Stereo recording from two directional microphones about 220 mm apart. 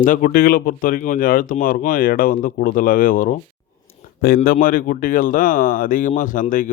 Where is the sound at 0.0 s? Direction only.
40° left (ahead or behind).